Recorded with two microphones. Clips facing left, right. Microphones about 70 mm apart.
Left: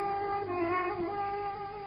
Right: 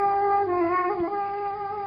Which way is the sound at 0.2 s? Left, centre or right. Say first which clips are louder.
Right 11 dB; right.